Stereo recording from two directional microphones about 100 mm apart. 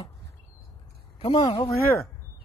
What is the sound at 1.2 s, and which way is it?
Speech, 60° left (ahead or behind).